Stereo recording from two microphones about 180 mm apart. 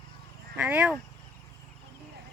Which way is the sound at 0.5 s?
10° right (ahead or behind).